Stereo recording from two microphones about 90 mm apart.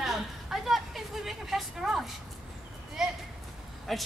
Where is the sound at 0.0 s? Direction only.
5° right (ahead or behind).